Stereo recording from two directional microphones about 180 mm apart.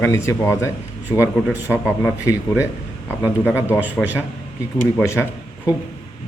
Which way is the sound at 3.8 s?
10° right (ahead or behind).